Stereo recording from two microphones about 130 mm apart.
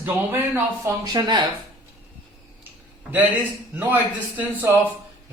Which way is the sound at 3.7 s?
15° right (ahead or behind).